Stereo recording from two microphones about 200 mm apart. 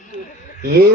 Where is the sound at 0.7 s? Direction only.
50° right (ahead or behind).